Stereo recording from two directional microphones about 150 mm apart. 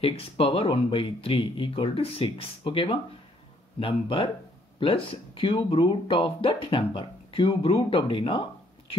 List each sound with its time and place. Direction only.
0.0 s speech: 40° left (ahead or behind)